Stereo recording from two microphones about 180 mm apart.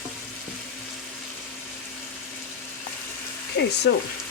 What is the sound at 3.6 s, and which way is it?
Speech, 60° left (ahead or behind).